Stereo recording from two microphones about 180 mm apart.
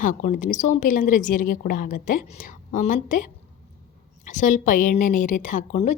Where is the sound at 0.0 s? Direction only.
45° left (ahead or behind).